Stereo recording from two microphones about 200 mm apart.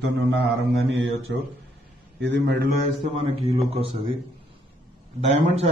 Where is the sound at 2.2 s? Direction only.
60° right (ahead or behind).